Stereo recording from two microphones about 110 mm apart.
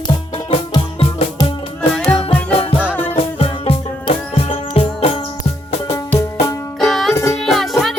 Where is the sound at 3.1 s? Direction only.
60° left (ahead or behind).